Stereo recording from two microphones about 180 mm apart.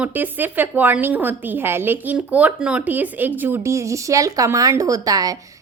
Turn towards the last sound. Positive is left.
turn(degrees=-20)  # may be behind; listen again after turning